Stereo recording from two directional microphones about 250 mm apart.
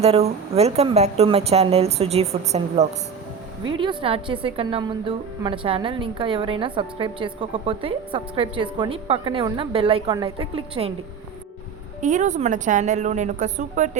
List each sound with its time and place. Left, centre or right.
0.0 s a woman's voice: right
11.9 s a woman's voice: right